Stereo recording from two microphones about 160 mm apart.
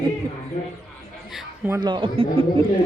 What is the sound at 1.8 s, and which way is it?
Speech, 30° right (ahead or behind).